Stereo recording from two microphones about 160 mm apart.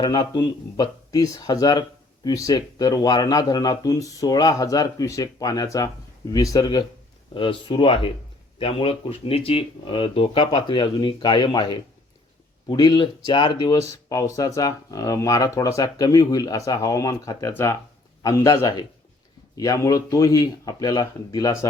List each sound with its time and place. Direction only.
0.0 s speech: 25° left (ahead or behind)
14.1 s speech: 20° left (ahead or behind)